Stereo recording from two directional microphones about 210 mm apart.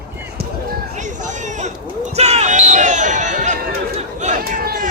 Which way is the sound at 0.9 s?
35° right (ahead or behind).